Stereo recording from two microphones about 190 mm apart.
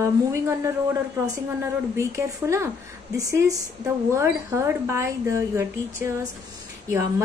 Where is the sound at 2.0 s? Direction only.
15° right (ahead or behind).